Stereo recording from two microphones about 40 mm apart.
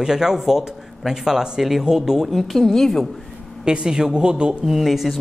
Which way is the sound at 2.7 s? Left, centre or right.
Centre.